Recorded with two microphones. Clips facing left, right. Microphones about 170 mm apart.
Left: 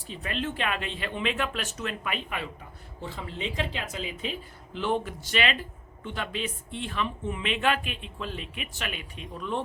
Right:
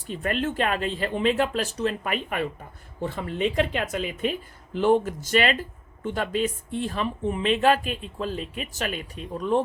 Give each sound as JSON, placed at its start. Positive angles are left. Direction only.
{"t": 0.1, "sound": "speech", "side_deg": -50}